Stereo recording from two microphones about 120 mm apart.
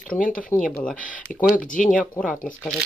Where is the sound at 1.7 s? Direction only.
90° left.